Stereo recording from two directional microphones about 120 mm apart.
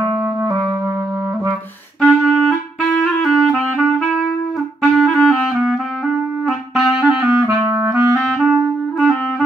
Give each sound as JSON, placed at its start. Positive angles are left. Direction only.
{"t": 2.0, "sound": "clarinet", "side_deg": 5}
{"t": 7.4, "sound": "clarinet", "side_deg": -25}
{"t": 8.2, "sound": "clarinet", "side_deg": 5}